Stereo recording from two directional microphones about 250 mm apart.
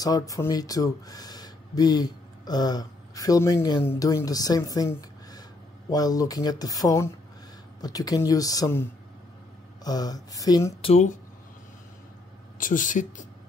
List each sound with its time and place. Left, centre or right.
0.0 s speech: centre
9.8 s speech: centre
12.5 s speech: left